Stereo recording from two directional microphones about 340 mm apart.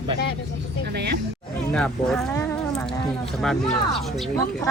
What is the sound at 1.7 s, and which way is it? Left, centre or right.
Speech, centre.